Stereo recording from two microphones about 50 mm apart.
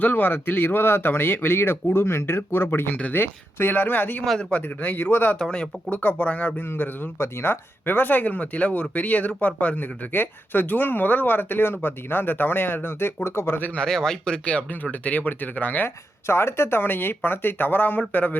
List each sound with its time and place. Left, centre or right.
0.0 s speech: left
4.4 s speech: left
5.4 s speech: centre
5.9 s speech: left
7.2 s speech: left
7.9 s speech: left
13.7 s speech: centre
14.4 s speech: left
16.2 s speech: left